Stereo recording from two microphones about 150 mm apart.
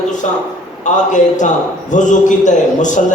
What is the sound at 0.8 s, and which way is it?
A man's voice, 55° left (ahead or behind).